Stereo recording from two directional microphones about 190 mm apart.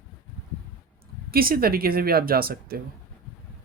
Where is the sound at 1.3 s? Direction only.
50° right (ahead or behind).